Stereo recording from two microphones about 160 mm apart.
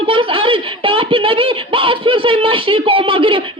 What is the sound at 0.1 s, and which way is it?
A woman's voice, 35° right (ahead or behind).